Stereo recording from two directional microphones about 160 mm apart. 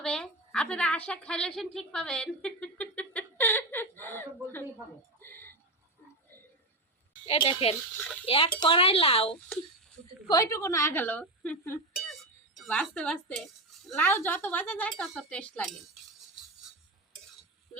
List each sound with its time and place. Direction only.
0.0 s a woman's voice: 5° left (ahead or behind)
5.2 s a sound: 15° left (ahead or behind)
7.3 s speech: 35° left (ahead or behind)
7.9 s speech: 5° left (ahead or behind)
8.3 s speech: 30° left (ahead or behind)
10.2 s speech: 20° left (ahead or behind)
11.9 s a sound: centre (ahead or behind)
14.0 s speech: 10° left (ahead or behind)